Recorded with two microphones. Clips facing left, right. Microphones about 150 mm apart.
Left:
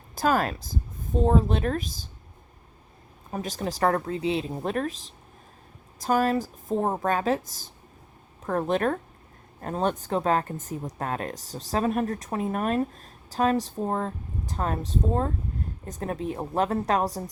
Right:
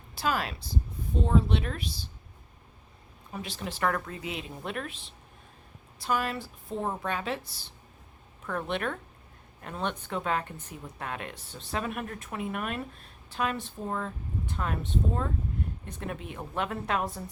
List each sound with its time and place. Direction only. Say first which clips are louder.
0.2 s speech: left 6 dB; 45° left (ahead or behind)
3.3 s speech: left 7 dB; 45° left (ahead or behind)
6.0 s a woman's voice: left 7 dB; 40° left (ahead or behind)